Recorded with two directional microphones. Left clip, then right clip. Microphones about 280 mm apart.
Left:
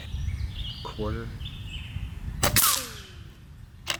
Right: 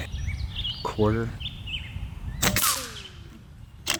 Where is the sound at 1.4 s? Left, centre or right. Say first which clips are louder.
Right 6 dB; centre.